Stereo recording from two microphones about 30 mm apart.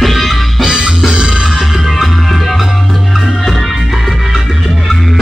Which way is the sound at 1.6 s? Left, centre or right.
Centre.